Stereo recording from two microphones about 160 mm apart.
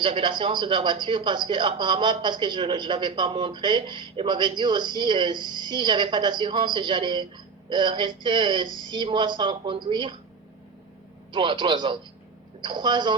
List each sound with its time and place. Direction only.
0.0 s speech: 35° right (ahead or behind)
11.3 s speech: 30° right (ahead or behind)